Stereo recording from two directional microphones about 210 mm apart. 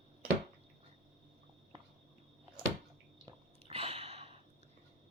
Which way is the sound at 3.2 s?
25° right (ahead or behind).